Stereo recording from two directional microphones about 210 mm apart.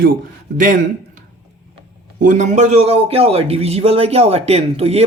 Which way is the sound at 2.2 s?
35° right (ahead or behind).